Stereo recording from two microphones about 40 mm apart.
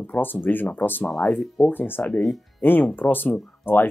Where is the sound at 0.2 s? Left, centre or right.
Left.